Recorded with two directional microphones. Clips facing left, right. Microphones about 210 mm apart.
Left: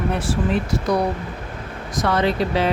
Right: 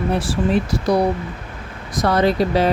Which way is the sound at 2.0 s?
40° right (ahead or behind).